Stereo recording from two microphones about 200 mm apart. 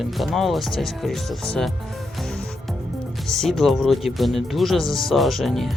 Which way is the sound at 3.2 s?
Centre (ahead or behind).